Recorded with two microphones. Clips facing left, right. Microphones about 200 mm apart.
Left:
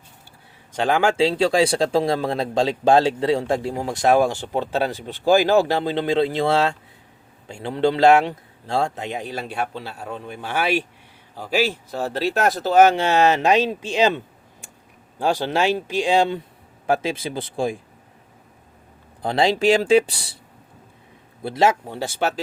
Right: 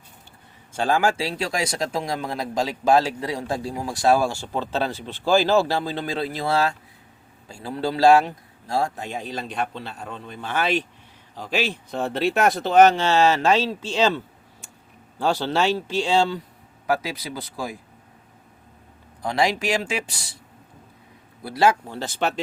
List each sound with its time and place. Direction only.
0.7 s speech: 15° left (ahead or behind)
15.2 s speech: 10° left (ahead or behind); by 17.7 s 25° left (ahead or behind)
19.2 s speech: 30° left (ahead or behind)
21.4 s speech: 25° left (ahead or behind); by 22.4 s 10° left (ahead or behind)